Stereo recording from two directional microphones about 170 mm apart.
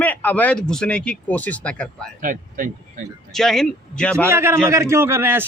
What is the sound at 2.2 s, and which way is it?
Speech, 50° right (ahead or behind).